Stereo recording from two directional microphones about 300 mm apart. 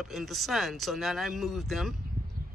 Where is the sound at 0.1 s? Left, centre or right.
Centre.